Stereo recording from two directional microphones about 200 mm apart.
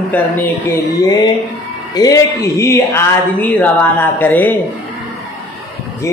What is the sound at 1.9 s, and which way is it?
Speech, 15° left (ahead or behind).